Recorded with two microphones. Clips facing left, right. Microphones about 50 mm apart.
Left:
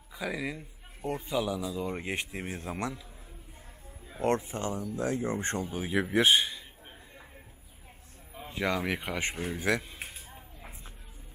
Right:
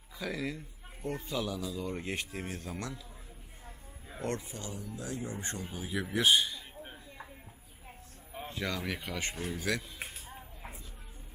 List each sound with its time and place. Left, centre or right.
0.1 s a man's voice: centre
4.2 s speech: left
8.4 s speech: centre
10.0 s a sound: centre